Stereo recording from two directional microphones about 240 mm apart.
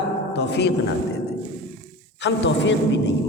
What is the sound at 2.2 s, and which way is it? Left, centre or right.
Speech, left.